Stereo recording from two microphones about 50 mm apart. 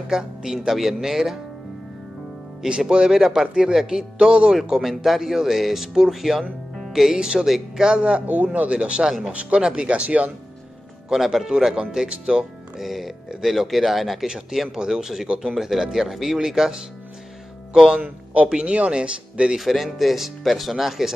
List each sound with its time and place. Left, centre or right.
0.1 s a man's voice: centre
2.6 s speech: centre
4.6 s speech: centre
8.0 s speech: right
11.1 s speech: centre
11.7 s speech: centre
12.8 s speech: centre
18.3 s speech: right
19.6 s speech: centre